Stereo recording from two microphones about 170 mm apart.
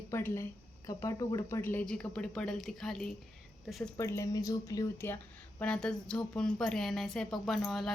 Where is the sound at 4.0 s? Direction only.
20° left (ahead or behind).